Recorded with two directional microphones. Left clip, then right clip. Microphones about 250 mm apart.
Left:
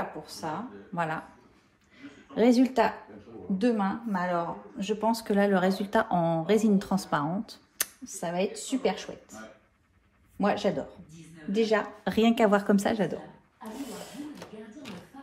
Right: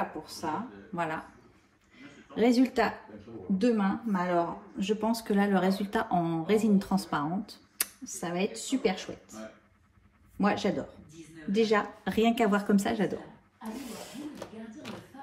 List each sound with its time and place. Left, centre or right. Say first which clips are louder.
0.2 s speech: right 1 dB; centre
2.0 s a sound: left 2 dB; centre
3.5 s speech: left 1 dB; centre
10.4 s speech: left 2 dB; centre